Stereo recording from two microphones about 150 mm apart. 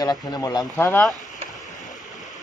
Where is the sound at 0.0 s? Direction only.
25° left (ahead or behind).